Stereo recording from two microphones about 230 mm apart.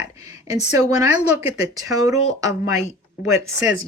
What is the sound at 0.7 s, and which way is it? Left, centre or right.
Speech, centre.